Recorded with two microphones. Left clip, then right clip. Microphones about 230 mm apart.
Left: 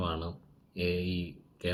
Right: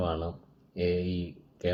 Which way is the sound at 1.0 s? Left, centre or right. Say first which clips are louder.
Right 2 dB; centre.